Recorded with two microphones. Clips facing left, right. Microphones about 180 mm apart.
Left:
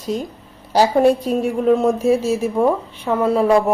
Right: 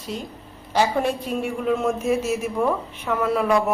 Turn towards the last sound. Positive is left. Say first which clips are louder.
# left 5 dB
turn(degrees=30)  # may be behind; listen again after turning